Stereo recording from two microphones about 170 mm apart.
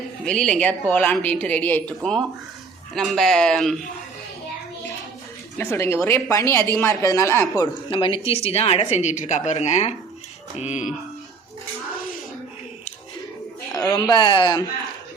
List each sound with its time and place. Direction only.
0.3 s a woman's voice: 5° left (ahead or behind)
5.5 s a woman's voice: 15° left (ahead or behind)
7.9 s a woman's voice: 30° left (ahead or behind)
10.6 s music: 45° left (ahead or behind)
13.7 s speech: 15° left (ahead or behind)
14.1 s a man's voice: 30° left (ahead or behind)